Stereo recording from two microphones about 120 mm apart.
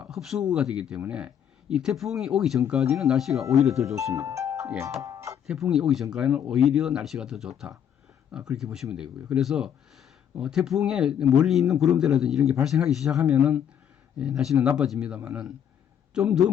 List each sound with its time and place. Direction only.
0.0 s speech: centre (ahead or behind)
4.0 s music: 25° right (ahead or behind)
5.0 s speech: 25° right (ahead or behind)
5.5 s speech: 5° right (ahead or behind)